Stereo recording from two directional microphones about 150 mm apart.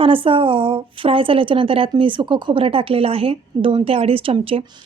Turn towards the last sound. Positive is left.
turn(degrees=-40)  # may be behind; listen again after turning